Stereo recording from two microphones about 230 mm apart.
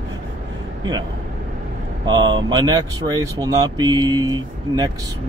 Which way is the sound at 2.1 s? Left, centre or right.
Centre.